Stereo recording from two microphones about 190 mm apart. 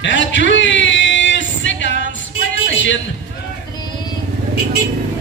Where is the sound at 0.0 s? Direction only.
75° left (ahead or behind).